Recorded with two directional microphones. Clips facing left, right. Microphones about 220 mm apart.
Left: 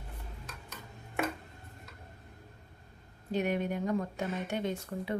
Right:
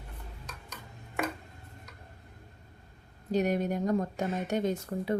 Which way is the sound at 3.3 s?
40° right (ahead or behind).